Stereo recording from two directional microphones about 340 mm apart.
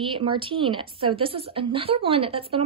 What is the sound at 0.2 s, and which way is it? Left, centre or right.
A woman's voice, centre.